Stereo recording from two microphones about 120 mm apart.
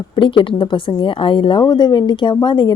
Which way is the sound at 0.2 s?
45° left (ahead or behind).